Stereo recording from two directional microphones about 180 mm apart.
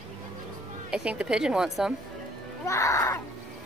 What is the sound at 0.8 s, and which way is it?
A woman's voice, 5° right (ahead or behind).